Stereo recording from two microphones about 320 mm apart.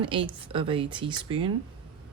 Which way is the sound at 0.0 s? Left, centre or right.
Centre.